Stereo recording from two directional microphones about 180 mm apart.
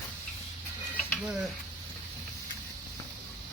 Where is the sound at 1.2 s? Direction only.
5° right (ahead or behind).